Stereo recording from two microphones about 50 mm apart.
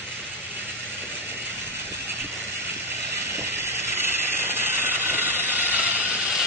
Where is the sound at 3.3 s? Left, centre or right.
Right.